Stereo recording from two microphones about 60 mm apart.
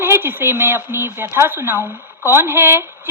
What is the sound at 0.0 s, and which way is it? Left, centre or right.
A woman's voice, right.